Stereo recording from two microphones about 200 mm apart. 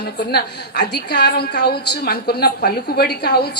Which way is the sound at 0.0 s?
55° left (ahead or behind).